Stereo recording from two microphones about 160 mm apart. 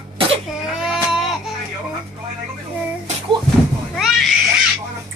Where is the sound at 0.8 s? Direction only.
5° right (ahead or behind).